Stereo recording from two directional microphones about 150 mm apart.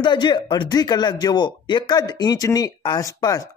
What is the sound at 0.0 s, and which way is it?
Speech, 30° left (ahead or behind).